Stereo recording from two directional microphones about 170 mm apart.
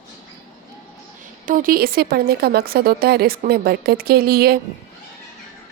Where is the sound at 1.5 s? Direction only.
55° right (ahead or behind).